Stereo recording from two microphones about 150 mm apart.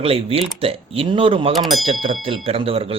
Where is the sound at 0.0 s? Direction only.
40° right (ahead or behind).